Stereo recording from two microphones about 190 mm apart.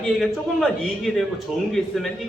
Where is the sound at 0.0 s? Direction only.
5° left (ahead or behind).